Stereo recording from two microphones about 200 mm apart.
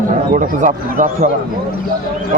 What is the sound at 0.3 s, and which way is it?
Speech, 40° right (ahead or behind).